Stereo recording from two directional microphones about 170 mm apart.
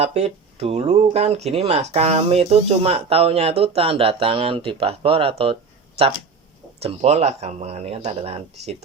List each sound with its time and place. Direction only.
0.0 s speech: 40° right (ahead or behind)
6.7 s speech: 35° right (ahead or behind)